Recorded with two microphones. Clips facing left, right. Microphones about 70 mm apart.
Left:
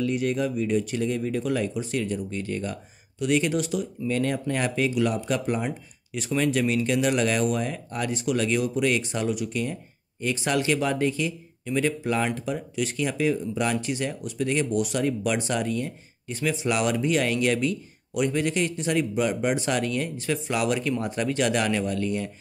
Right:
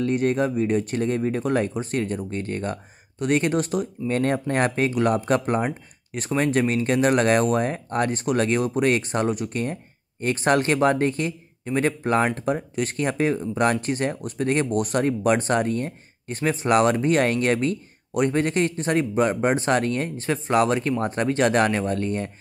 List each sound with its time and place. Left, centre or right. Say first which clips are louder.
0.0 s speech: right 3 dB; right